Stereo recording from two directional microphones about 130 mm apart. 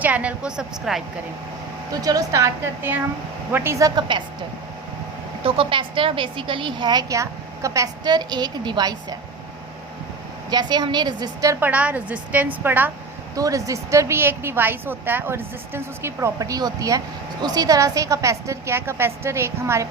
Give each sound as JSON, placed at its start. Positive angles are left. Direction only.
{"t": 0.0, "sound": "a woman's voice", "side_deg": -10}
{"t": 1.9, "sound": "a woman's voice", "side_deg": -30}
{"t": 5.4, "sound": "a woman's voice", "side_deg": -45}
{"t": 10.5, "sound": "a woman's voice", "side_deg": -35}
{"t": 11.6, "sound": "a woman's voice", "side_deg": -10}
{"t": 13.3, "sound": "a woman's voice", "side_deg": -25}